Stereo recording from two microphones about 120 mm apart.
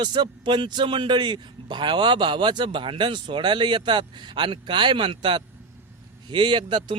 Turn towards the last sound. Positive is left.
turn(degrees=-40)  # may be behind; listen again after turning